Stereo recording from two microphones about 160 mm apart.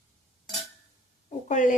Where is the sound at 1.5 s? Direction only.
50° left (ahead or behind).